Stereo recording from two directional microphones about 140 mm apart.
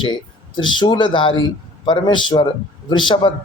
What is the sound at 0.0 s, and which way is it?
Speech, 35° left (ahead or behind).